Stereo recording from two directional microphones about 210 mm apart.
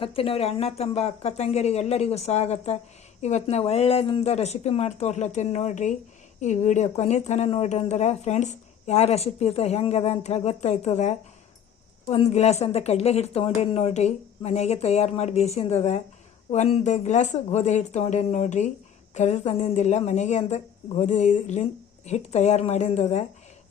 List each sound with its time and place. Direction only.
0.0 s speech: 25° left (ahead or behind)